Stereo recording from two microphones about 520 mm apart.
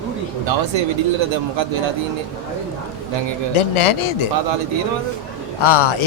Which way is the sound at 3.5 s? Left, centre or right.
Left.